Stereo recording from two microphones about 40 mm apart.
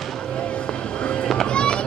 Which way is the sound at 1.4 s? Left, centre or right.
Left.